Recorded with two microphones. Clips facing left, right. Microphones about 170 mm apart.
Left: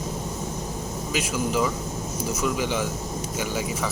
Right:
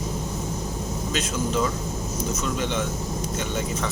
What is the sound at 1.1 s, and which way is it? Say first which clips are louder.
Speech: left 1 dB; 10° left (ahead or behind).